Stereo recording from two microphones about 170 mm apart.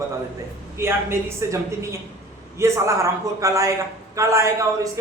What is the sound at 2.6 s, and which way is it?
A man's voice, 15° right (ahead or behind).